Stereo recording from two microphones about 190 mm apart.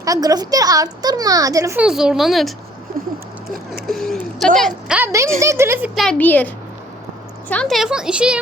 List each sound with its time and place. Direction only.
0.0 s a woman's voice: 20° right (ahead or behind); by 2.5 s centre (ahead or behind)
3.8 s a sound: centre (ahead or behind)
4.9 s a woman's voice: 15° right (ahead or behind)
5.9 s a woman's voice: centre (ahead or behind)